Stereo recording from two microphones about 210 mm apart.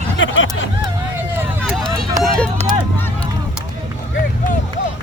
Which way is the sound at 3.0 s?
10° left (ahead or behind).